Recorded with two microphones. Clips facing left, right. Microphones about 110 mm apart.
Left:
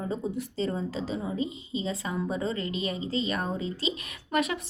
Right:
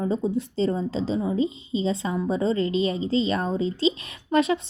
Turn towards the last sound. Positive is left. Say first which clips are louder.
# right 7 dB
turn(degrees=-30)  # may be behind; listen again after turning